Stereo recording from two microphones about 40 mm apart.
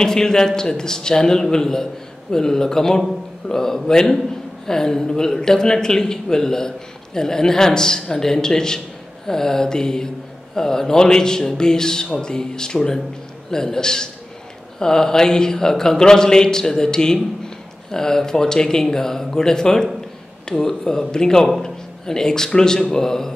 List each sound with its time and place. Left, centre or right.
0.0 s a man's voice: centre